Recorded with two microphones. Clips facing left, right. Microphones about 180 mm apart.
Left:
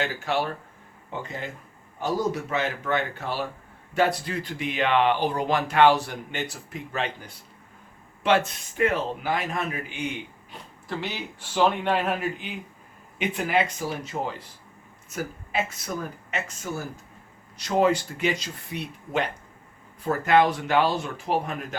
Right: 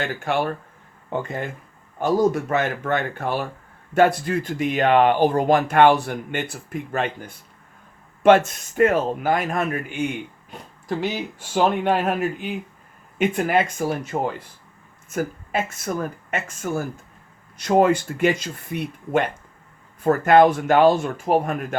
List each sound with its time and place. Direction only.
0.3 s speech: 55° right (ahead or behind)
8.2 s speech: 45° right (ahead or behind)